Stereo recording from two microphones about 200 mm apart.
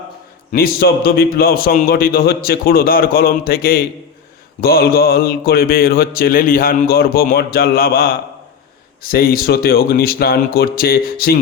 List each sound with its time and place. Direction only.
0.5 s mantra: 50° left (ahead or behind)